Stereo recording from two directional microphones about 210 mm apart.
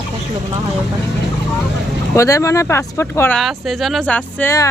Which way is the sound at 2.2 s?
15° left (ahead or behind).